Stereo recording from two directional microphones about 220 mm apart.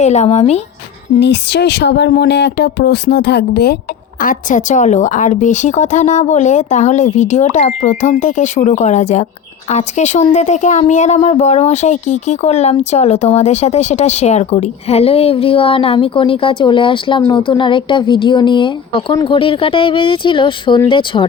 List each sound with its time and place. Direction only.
0.0 s speech: 30° left (ahead or behind)
1.2 s a woman's voice: 50° left (ahead or behind); by 21.2 s 25° left (ahead or behind)